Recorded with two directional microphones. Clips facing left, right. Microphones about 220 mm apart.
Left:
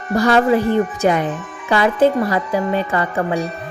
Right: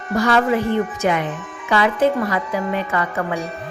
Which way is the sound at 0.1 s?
35° left (ahead or behind).